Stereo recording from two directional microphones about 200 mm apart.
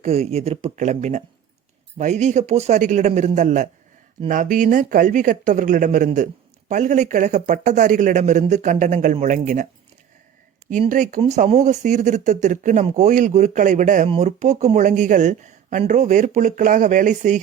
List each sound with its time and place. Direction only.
0.0 s speech: 30° right (ahead or behind)
10.7 s speech: 40° right (ahead or behind)